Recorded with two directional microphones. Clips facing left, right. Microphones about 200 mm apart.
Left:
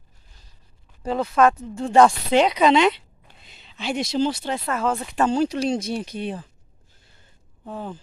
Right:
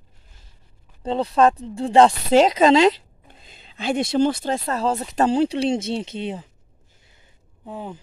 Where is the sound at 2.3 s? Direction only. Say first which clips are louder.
Right 3 dB; 40° right (ahead or behind).